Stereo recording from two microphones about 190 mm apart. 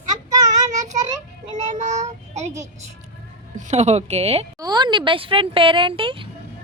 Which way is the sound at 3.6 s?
35° right (ahead or behind).